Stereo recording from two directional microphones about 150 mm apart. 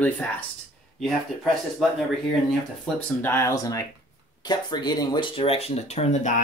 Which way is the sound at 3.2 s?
20° left (ahead or behind).